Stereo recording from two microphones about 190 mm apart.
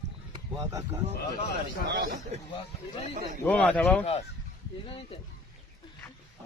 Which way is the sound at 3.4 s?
5° left (ahead or behind).